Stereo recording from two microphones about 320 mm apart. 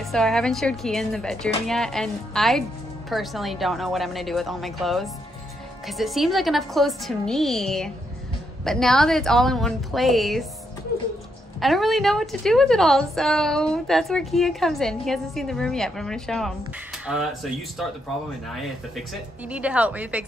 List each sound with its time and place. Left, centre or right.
0.0 s a woman's voice: centre
11.6 s a woman's voice: centre